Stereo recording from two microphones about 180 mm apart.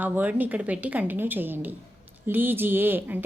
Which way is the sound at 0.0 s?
10° right (ahead or behind).